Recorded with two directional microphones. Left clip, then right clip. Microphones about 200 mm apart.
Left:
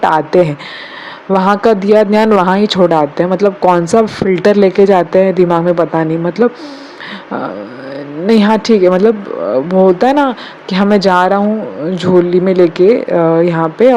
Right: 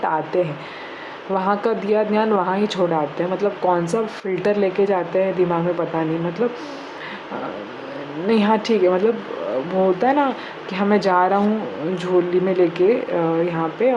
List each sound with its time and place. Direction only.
0.0 s a man's voice: 40° left (ahead or behind)
8.3 s a man's voice: 35° left (ahead or behind)